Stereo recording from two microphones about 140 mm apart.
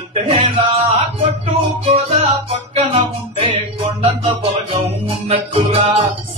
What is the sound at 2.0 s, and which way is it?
Music, 45° right (ahead or behind).